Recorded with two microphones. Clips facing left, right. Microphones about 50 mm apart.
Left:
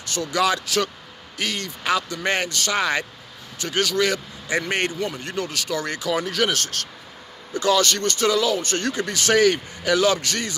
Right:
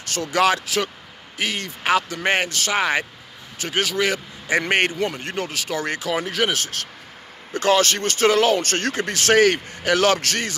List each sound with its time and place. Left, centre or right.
0.1 s a man's voice: right
1.4 s speech: right
2.7 s speech: right
4.6 s speech: right
7.5 s a man's voice: right